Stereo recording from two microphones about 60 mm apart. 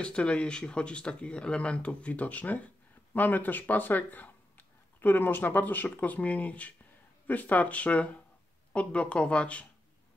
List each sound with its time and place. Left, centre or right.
0.0 s speech: centre